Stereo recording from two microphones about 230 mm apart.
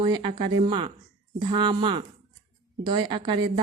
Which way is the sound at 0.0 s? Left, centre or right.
Right.